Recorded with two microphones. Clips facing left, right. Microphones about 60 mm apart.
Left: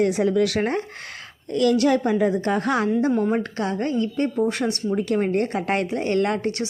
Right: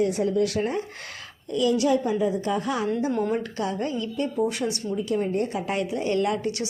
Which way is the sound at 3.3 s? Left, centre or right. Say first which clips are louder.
Left 3 dB; left.